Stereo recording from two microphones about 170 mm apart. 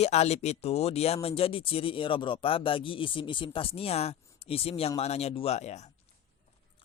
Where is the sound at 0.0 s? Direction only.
40° left (ahead or behind).